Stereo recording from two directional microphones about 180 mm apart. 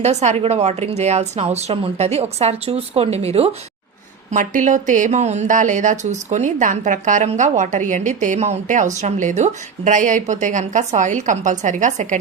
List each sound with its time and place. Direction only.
0.0 s speech: 40° right (ahead or behind)
4.3 s speech: 45° right (ahead or behind)